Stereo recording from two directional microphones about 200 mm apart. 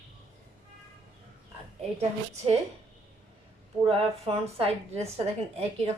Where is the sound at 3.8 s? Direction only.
30° right (ahead or behind).